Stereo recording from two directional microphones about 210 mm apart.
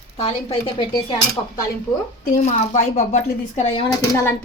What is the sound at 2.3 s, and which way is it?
Speech, 35° left (ahead or behind).